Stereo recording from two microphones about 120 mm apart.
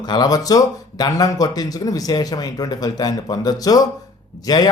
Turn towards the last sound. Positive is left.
turn(degrees=35)  # may be behind; listen again after turning